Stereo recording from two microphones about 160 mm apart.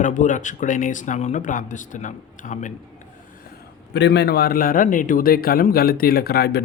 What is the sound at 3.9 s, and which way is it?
A man's voice, 90° left.